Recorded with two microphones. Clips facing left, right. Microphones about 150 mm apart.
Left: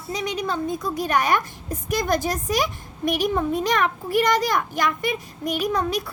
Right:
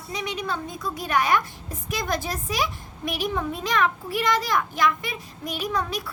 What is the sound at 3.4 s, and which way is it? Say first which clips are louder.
A child's voice: left 3 dB; 45° left (ahead or behind).